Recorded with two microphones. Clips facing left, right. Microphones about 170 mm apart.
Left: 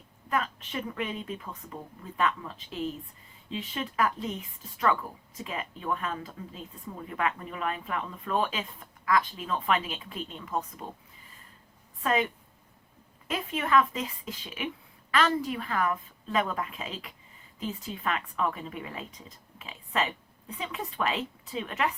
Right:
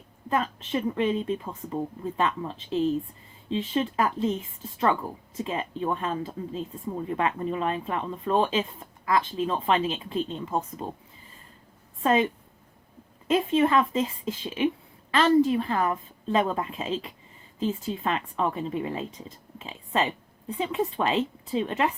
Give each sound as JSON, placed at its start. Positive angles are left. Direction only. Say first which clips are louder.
{"t": 0.3, "sound": "speech", "louder": "right 4 dB", "side_deg": -30}
{"t": 12.0, "sound": "speech", "louder": "right 5 dB", "side_deg": -30}